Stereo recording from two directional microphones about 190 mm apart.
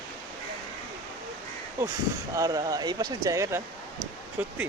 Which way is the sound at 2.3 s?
20° right (ahead or behind).